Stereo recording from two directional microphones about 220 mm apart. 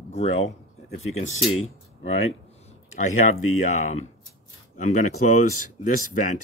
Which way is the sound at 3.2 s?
35° left (ahead or behind).